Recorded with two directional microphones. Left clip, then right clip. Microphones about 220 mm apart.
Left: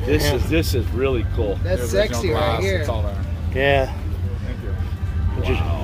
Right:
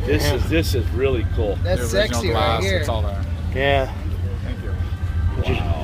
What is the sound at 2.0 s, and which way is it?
Speech, 55° right (ahead or behind).